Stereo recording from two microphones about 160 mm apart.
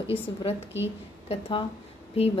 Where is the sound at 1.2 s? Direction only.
40° left (ahead or behind).